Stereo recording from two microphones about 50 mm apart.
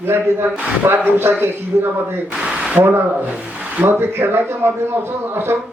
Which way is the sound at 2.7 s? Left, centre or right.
Right.